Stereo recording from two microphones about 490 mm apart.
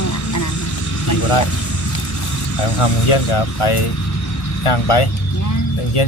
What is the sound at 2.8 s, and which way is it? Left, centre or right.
Speech, left.